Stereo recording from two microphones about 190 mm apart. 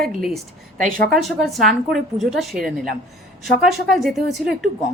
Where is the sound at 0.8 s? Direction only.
45° right (ahead or behind).